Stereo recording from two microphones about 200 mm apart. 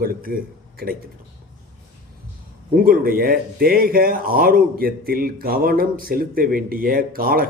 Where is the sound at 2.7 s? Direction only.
45° right (ahead or behind).